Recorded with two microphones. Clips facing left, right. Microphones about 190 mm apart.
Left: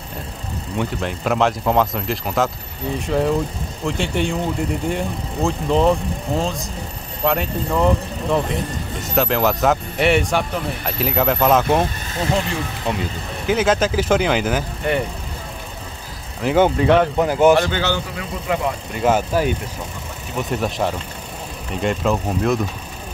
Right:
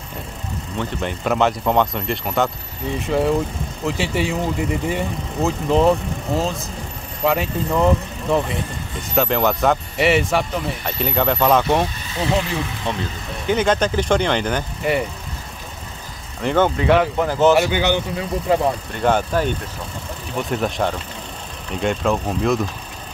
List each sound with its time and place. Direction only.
1.0 s speech: centre (ahead or behind)
12.9 s speech: 10° left (ahead or behind)
16.3 s speech: 5° left (ahead or behind)
17.2 s speech: 15° left (ahead or behind)
17.6 s a man's voice: 15° right (ahead or behind)
18.5 s speech: 30° right (ahead or behind)
18.9 s speech: 5° left (ahead or behind)